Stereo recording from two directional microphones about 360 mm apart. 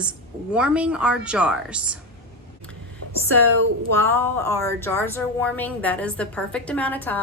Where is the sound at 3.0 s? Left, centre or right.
Right.